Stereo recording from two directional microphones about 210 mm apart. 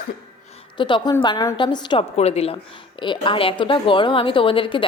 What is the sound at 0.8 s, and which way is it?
A woman's voice, 20° left (ahead or behind).